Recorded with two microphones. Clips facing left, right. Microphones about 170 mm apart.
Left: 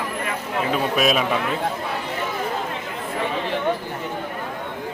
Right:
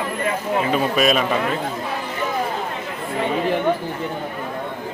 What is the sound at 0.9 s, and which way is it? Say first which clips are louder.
Speech: even; centre (ahead or behind).